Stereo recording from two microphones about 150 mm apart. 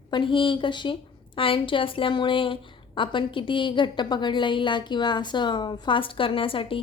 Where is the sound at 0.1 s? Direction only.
35° left (ahead or behind).